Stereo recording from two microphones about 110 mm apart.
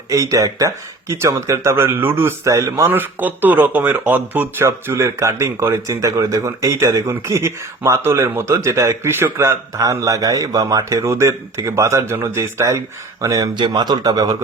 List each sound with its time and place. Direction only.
0.1 s speech: 30° right (ahead or behind)